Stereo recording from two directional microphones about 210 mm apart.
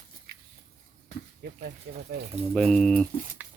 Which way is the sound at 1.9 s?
50° right (ahead or behind).